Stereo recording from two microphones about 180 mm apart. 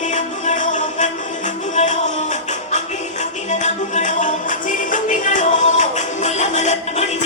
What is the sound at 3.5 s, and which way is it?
Music, 40° left (ahead or behind).